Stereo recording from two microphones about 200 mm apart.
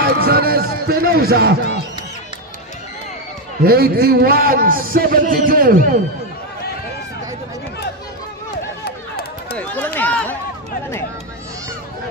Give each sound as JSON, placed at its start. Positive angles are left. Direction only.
{"t": 0.0, "sound": "a man's voice", "side_deg": -50}
{"t": 3.6, "sound": "a man's voice", "side_deg": -50}
{"t": 9.6, "sound": "run", "side_deg": 10}